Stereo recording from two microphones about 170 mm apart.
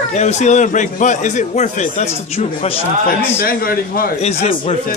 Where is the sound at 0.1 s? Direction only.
40° left (ahead or behind).